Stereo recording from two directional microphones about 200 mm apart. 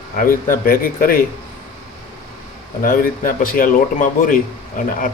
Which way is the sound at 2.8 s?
45° left (ahead or behind).